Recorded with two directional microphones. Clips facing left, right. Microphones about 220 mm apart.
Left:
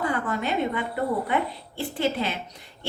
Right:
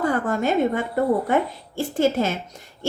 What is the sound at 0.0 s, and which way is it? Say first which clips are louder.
A woman's voice: right 5 dB; 45° right (ahead or behind).